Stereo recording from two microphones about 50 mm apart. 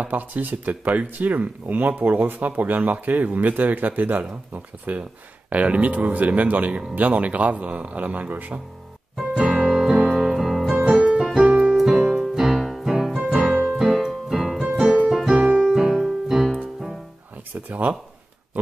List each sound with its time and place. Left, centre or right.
0.0 s speech: right
9.1 s music: centre
11.0 s keyboard: centre
11.3 s piano: centre
11.7 s keyboard: centre
12.9 s music: centre
13.7 s keyboard: centre
17.6 s speech: right